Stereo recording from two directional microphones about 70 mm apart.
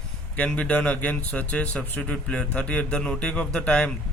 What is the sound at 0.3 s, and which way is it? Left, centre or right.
Speech, centre.